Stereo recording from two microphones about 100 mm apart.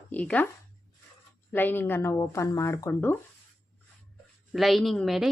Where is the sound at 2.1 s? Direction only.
35° left (ahead or behind).